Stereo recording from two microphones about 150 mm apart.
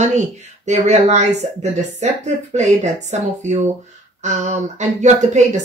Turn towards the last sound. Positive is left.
turn(degrees=-50)  # may be behind; listen again after turning